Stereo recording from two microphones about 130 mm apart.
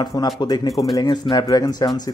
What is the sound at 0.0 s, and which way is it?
Speech, 30° left (ahead or behind).